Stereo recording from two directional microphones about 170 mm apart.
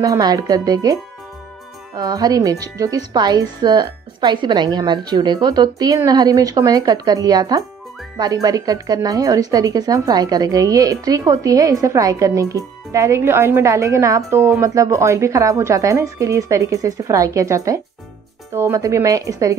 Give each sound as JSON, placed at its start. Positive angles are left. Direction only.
{"t": 0.0, "sound": "speech", "side_deg": -20}
{"t": 2.0, "sound": "speech", "side_deg": -20}